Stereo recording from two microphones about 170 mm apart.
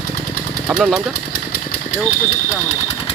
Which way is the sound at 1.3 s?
60° left (ahead or behind).